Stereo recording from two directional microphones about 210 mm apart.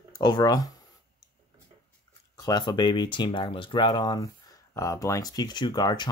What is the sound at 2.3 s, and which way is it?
Speech, 20° left (ahead or behind).